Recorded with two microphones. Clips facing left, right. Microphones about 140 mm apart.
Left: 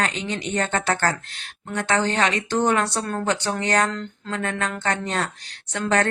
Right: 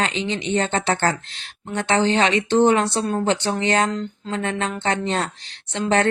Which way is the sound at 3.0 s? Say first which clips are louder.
Right 3 dB; 15° right (ahead or behind).